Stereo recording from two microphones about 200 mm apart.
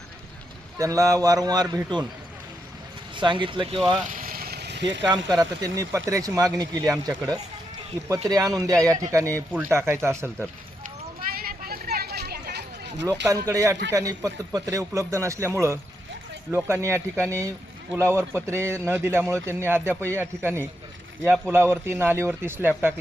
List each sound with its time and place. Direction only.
0.8 s speech: 15° right (ahead or behind)
3.2 s speech: 25° right (ahead or behind)
3.8 s speech: centre (ahead or behind)
4.1 s vehicle: 45° right (ahead or behind); by 5.0 s 60° right (ahead or behind)
5.3 s speech: 20° right (ahead or behind)
11.3 s a sound: 50° right (ahead or behind)
13.2 s speech: 15° right (ahead or behind)
21.2 s speech: centre (ahead or behind)
21.5 s speech: 10° right (ahead or behind)